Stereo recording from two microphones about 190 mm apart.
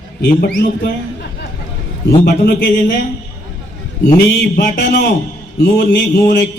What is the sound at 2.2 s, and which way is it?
Speech, 55° left (ahead or behind).